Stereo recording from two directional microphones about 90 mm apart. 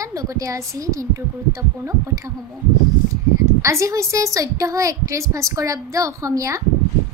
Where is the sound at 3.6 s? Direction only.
35° right (ahead or behind).